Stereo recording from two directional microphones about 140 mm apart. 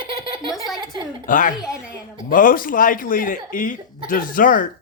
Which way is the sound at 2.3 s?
85° left.